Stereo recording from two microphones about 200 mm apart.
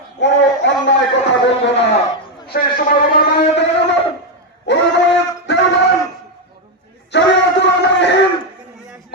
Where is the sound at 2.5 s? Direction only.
45° left (ahead or behind).